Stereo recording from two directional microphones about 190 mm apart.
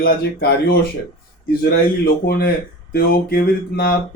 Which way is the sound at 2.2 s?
55° left (ahead or behind).